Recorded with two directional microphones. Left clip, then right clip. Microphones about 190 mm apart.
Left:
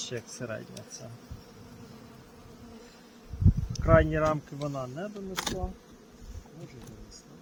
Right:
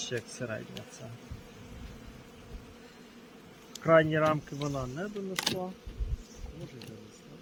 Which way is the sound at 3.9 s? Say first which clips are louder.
Even; centre (ahead or behind).